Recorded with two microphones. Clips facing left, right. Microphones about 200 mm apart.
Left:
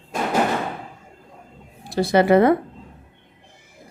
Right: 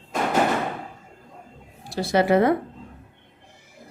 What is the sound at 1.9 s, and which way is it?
Speech, 60° left (ahead or behind).